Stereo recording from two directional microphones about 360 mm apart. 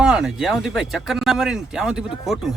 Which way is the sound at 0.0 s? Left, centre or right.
Centre.